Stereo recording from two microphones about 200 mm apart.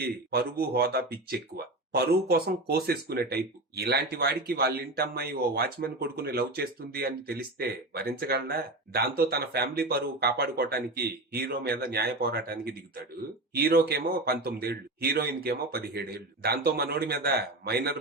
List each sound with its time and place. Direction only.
0.3 s speech: 50° right (ahead or behind)
13.6 s speech: 50° right (ahead or behind)